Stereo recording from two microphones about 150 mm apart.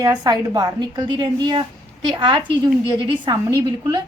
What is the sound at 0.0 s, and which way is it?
A woman's voice, 25° right (ahead or behind).